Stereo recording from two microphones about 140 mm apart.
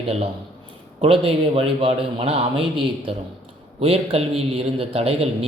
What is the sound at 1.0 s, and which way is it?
A man's voice, 40° right (ahead or behind).